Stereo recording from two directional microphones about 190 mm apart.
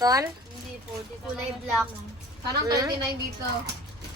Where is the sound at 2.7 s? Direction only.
20° right (ahead or behind).